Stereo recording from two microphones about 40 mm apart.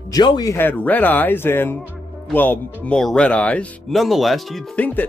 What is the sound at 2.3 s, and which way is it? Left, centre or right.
Speech, left.